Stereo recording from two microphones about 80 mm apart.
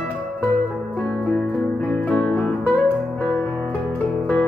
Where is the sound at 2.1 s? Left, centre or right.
Centre.